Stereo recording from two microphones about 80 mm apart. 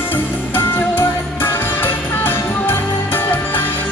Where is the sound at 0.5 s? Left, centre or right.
Left.